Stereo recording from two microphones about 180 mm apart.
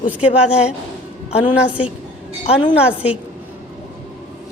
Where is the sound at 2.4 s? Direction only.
30° left (ahead or behind).